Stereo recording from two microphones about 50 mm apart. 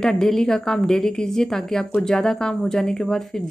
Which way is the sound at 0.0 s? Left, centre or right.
Centre.